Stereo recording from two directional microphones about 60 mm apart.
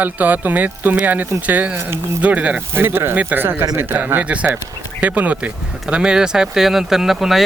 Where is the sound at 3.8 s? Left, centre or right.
Right.